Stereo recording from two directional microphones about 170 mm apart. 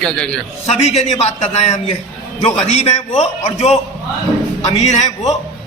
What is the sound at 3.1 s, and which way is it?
Speech, 40° left (ahead or behind).